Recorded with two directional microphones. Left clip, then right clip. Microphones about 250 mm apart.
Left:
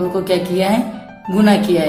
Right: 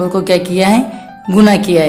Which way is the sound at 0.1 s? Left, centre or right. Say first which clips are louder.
Right 4 dB; right.